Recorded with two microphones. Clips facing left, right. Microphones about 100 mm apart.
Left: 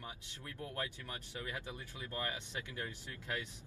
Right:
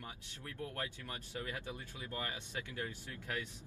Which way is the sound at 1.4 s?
20° left (ahead or behind).